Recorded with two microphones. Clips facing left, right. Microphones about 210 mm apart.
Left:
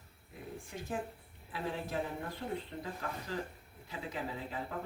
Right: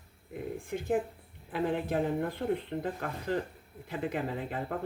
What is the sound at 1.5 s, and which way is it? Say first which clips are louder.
Speech: right 7 dB; 60° right (ahead or behind).